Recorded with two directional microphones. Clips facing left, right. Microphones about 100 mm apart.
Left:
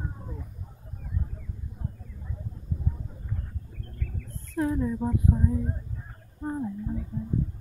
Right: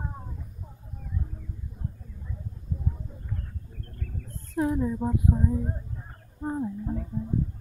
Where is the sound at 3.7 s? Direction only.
40° right (ahead or behind).